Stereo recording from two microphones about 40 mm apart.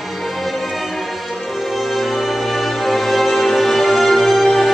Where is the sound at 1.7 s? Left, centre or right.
Centre.